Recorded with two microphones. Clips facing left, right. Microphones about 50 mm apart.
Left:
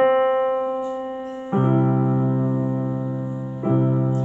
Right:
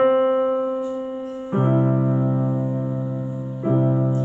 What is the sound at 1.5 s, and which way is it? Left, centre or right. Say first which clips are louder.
Music: even; centre.